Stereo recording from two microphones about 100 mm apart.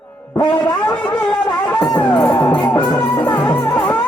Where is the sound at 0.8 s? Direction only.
15° left (ahead or behind).